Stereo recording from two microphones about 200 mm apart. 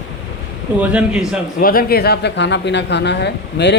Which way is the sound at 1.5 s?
45° left (ahead or behind).